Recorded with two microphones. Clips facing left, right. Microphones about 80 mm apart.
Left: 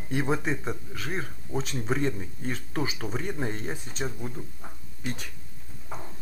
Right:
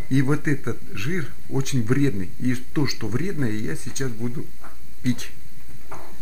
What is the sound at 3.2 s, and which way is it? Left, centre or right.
Speech, centre.